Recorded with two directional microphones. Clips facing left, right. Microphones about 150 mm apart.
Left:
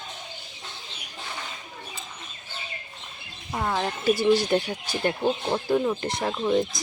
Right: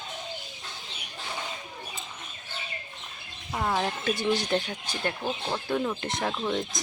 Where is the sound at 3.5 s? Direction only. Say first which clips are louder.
Left 1 dB; centre (ahead or behind).